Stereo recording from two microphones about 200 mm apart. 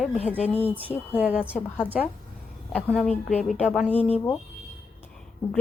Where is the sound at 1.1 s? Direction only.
5° right (ahead or behind).